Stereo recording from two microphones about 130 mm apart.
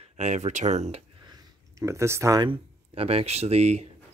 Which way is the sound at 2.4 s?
50° right (ahead or behind).